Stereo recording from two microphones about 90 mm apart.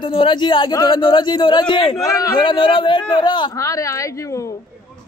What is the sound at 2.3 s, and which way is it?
A man's voice, 65° left (ahead or behind).